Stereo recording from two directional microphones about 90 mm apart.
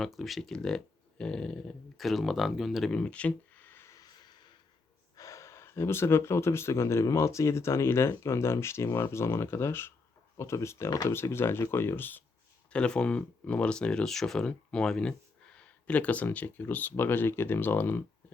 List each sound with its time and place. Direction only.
0.0 s speech: centre (ahead or behind)
2.9 s a sound: 15° left (ahead or behind)
5.1 s speech: 40° left (ahead or behind); by 12.2 s 20° left (ahead or behind)
12.7 s speech: 10° left (ahead or behind)